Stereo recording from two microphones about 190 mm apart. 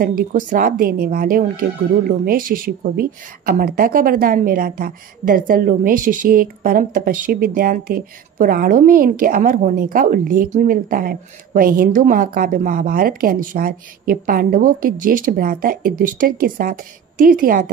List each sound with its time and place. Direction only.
0.0 s speech: 45° right (ahead or behind)